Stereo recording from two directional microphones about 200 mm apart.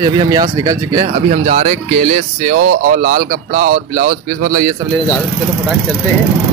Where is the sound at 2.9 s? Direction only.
40° right (ahead or behind).